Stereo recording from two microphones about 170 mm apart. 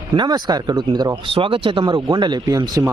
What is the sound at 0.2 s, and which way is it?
Speech, 25° right (ahead or behind).